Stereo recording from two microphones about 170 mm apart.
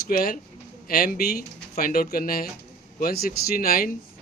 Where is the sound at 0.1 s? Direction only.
60° left (ahead or behind).